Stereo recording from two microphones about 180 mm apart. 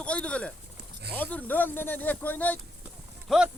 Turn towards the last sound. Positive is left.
turn(degrees=-5)  # may be behind; listen again after turning